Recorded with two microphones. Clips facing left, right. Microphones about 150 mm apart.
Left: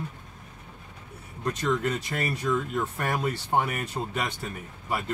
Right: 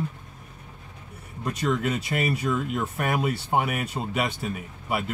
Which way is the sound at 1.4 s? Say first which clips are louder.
Right 1 dB; 10° right (ahead or behind).